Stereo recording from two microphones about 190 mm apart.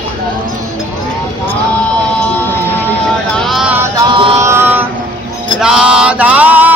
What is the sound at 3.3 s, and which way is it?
Music, centre (ahead or behind).